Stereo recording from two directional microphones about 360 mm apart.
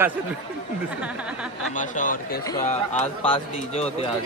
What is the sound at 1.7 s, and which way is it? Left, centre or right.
Speech, left.